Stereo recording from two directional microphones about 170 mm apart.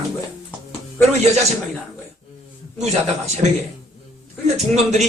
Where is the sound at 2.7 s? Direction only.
40° right (ahead or behind).